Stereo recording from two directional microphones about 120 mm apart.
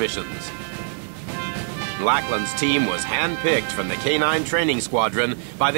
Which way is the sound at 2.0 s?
20° right (ahead or behind).